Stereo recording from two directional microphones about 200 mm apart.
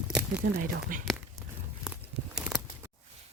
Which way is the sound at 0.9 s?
40° right (ahead or behind).